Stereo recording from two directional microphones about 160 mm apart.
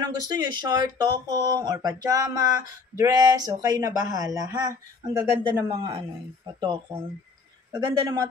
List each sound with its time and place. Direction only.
0.0 s speech: 25° right (ahead or behind)
5.9 s speech: 25° right (ahead or behind)